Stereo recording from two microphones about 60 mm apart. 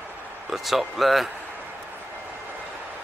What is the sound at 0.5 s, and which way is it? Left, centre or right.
Speech, centre.